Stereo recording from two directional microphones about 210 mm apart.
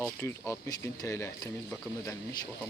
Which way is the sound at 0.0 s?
10° left (ahead or behind).